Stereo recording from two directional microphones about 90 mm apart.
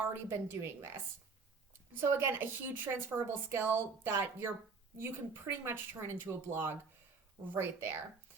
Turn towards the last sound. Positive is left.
turn(degrees=-25)  # may be behind; listen again after turning